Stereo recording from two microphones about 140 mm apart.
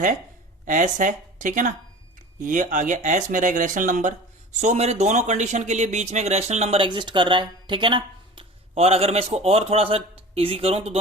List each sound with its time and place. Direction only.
0.6 s speech: 65° right (ahead or behind); by 10.9 s 45° right (ahead or behind)